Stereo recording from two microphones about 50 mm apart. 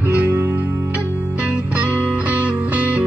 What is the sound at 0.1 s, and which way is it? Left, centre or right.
Music, right.